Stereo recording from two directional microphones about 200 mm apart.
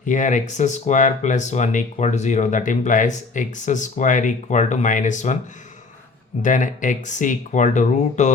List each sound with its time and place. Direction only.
0.0 s speech: 40° left (ahead or behind)
6.4 s speech: 40° left (ahead or behind)